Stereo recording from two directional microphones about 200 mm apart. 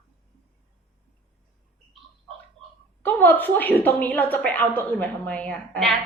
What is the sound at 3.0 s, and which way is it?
A woman's voice, 10° left (ahead or behind).